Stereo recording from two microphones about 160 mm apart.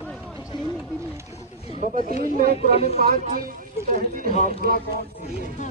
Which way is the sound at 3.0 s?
65° right (ahead or behind).